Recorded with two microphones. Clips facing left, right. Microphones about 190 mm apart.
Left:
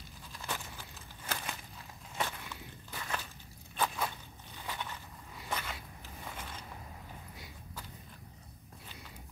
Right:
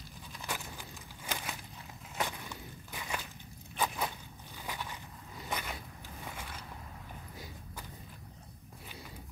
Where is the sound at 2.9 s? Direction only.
15° right (ahead or behind).